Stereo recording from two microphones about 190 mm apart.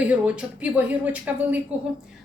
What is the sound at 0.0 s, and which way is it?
A woman's voice, 5° right (ahead or behind).